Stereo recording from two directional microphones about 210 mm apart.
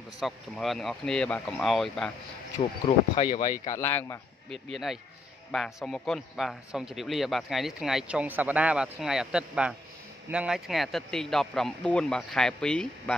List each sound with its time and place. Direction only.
0.2 s a man's voice: centre (ahead or behind)
3.3 s speech: 40° left (ahead or behind)
3.7 s speech: 10° left (ahead or behind)
4.5 s a man's voice: centre (ahead or behind)